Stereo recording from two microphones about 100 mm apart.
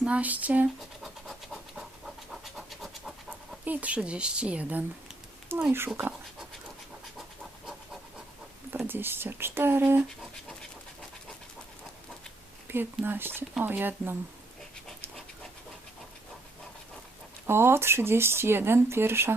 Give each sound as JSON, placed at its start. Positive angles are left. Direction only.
{"t": 0.0, "sound": "speech", "side_deg": -15}
{"t": 0.8, "sound": "pant", "side_deg": 0}
{"t": 3.7, "sound": "speech", "side_deg": -15}
{"t": 5.5, "sound": "a sound", "side_deg": -25}
{"t": 7.2, "sound": "a sound", "side_deg": -5}
{"t": 8.7, "sound": "speech", "side_deg": -20}
{"t": 12.6, "sound": "speech", "side_deg": -20}
{"t": 17.4, "sound": "speech", "side_deg": -25}